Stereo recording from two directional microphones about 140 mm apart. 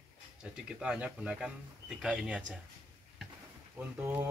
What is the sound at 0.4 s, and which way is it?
Speech, 5° right (ahead or behind).